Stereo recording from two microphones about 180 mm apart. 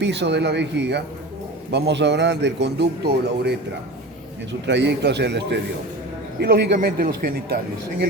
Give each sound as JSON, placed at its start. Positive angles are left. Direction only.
{"t": 0.0, "sound": "speech", "side_deg": -75}
{"t": 4.6, "sound": "speech", "side_deg": -75}